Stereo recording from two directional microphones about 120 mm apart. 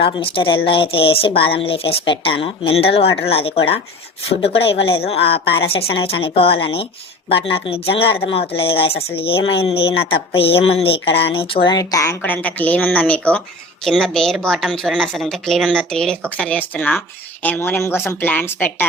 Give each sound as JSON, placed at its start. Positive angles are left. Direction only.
{"t": 0.0, "sound": "speech", "side_deg": 45}
{"t": 11.8, "sound": "a woman's voice", "side_deg": 30}